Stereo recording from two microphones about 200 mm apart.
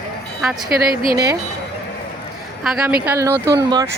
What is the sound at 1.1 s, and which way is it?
Speech, 20° right (ahead or behind).